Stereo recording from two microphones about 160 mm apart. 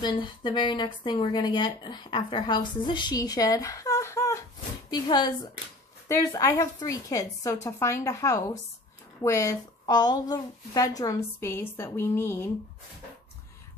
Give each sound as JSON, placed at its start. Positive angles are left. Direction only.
{"t": 0.0, "sound": "speech", "side_deg": 30}